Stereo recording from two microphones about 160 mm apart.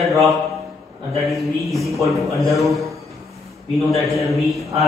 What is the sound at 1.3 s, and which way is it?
A man's voice, centre (ahead or behind).